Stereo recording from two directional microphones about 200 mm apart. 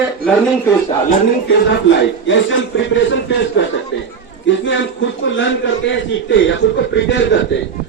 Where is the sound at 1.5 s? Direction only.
60° left (ahead or behind).